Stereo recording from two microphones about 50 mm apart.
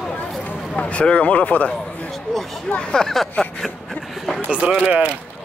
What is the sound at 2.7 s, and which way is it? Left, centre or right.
Speech, centre.